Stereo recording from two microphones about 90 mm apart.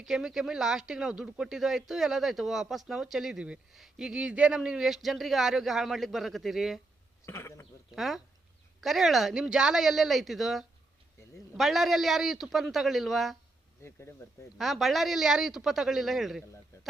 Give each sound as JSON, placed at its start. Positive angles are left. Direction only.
{"t": 0.0, "sound": "speech", "side_deg": -5}
{"t": 7.3, "sound": "speech", "side_deg": 30}
{"t": 7.9, "sound": "speech", "side_deg": 0}
{"t": 14.6, "sound": "speech", "side_deg": 0}